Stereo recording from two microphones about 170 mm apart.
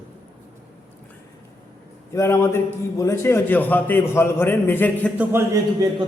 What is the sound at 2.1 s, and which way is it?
A man's voice, 15° left (ahead or behind).